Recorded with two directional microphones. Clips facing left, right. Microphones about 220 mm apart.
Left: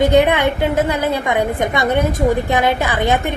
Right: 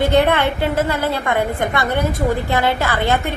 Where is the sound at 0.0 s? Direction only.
15° left (ahead or behind).